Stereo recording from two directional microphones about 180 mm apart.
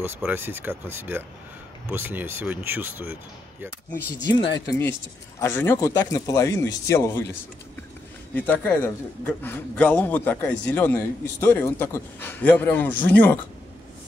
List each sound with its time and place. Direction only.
0.0 s speech: 10° right (ahead or behind)
4.6 s a man's voice: 15° left (ahead or behind)
8.4 s a man's voice: 10° left (ahead or behind)